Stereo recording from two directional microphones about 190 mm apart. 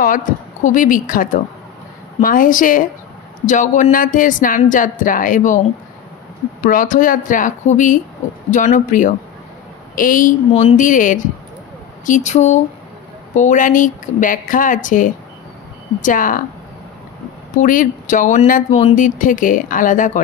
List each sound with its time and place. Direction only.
0.0 s speech: 45° left (ahead or behind)
6.6 s speech: 45° left (ahead or behind)
10.5 s speech: 35° left (ahead or behind)
17.6 s speech: 45° left (ahead or behind)